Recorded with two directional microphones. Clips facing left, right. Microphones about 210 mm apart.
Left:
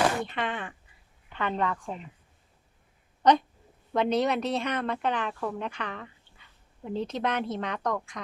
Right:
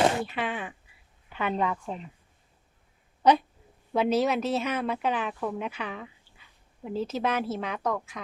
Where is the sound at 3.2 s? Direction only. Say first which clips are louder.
Even; 10° right (ahead or behind).